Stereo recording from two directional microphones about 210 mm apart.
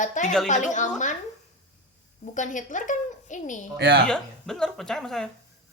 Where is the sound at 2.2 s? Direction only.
35° left (ahead or behind).